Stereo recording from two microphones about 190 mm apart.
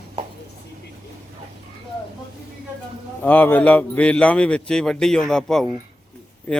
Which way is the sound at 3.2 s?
10° left (ahead or behind).